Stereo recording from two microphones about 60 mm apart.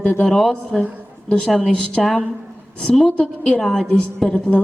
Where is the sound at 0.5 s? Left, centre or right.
Centre.